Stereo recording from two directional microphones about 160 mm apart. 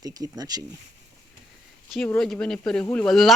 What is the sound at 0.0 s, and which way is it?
Speech, 25° right (ahead or behind).